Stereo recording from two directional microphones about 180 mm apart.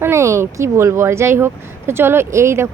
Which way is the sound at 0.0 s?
15° right (ahead or behind).